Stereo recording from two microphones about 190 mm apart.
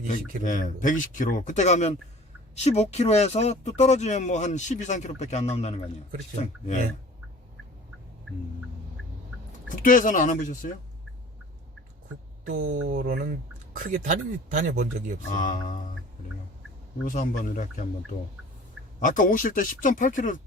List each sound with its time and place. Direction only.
0.1 s speech: 45° left (ahead or behind)
9.6 s speech: 45° left (ahead or behind)
12.5 s speech: 90° right
12.9 s speech: 50° right (ahead or behind)
15.3 s speech: 45° left (ahead or behind)
17.1 s speech: 45° left (ahead or behind)
18.9 s speech: 45° left (ahead or behind)